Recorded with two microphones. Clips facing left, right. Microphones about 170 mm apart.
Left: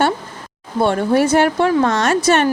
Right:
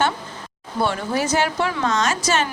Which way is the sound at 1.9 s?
60° left (ahead or behind).